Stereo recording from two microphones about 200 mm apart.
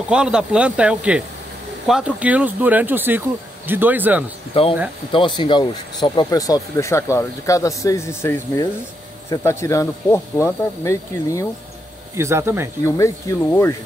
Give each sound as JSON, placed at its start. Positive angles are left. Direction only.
{"t": 0.1, "sound": "speech", "side_deg": -5}
{"t": 4.6, "sound": "speech", "side_deg": 30}
{"t": 12.2, "sound": "speech", "side_deg": -15}
{"t": 12.8, "sound": "speech", "side_deg": 15}